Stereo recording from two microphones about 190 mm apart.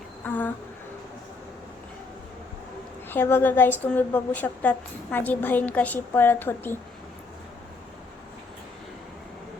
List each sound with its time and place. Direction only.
0.3 s a woman's voice: 10° left (ahead or behind)
3.1 s a woman's voice: 10° left (ahead or behind)